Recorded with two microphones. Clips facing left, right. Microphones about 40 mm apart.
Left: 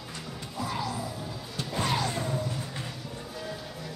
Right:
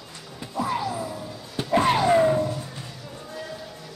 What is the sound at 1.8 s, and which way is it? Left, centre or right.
Music, right.